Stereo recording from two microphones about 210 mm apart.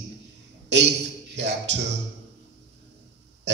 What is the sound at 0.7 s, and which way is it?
Speech, 55° right (ahead or behind).